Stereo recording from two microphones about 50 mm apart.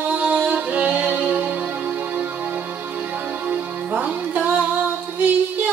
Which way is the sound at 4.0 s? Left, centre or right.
Right.